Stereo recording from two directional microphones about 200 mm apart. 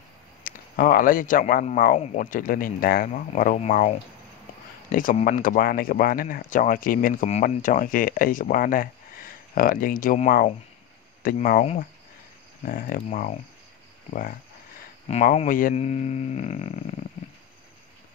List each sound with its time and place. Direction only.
0.4 s speech: 45° left (ahead or behind)
15.0 s speech: 35° left (ahead or behind)